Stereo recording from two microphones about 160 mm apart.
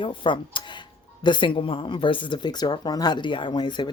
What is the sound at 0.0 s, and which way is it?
A woman's voice, 30° left (ahead or behind).